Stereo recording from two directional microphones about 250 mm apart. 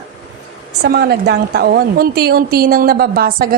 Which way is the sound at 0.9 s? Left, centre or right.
Right.